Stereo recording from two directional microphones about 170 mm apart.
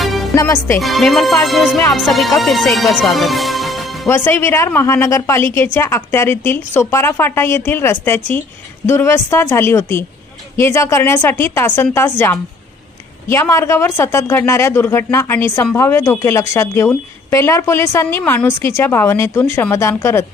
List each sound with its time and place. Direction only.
0.0 s music: centre (ahead or behind)
0.3 s speech: 15° left (ahead or behind)
0.8 s music: centre (ahead or behind)
4.1 s speech: 15° left (ahead or behind)